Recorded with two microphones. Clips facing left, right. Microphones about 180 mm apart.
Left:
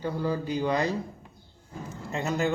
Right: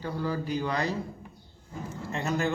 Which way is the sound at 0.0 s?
20° left (ahead or behind).